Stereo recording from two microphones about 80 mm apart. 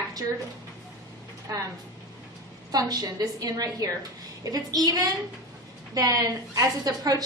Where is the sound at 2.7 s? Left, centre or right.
Right.